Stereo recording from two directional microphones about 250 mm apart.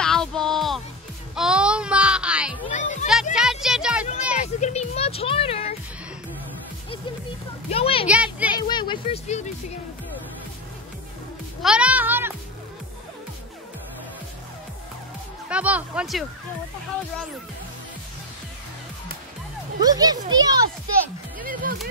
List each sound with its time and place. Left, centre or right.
0.0 s music: centre
2.7 s children playing: left
3.3 s music: centre
4.4 s music: left
7.7 s a sound: left
8.1 s a sound: centre
8.5 s a sound: centre
11.6 s music: centre
15.5 s speech: centre
19.8 s a child's voice: centre
21.4 s music: right